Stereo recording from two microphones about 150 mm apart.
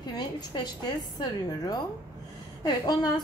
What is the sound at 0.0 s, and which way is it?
Speech, 30° left (ahead or behind).